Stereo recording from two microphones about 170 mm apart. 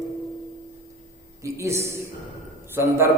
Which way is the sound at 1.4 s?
15° right (ahead or behind).